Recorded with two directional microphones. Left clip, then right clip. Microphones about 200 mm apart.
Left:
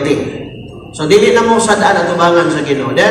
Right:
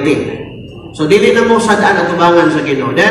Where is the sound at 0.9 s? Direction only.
20° left (ahead or behind).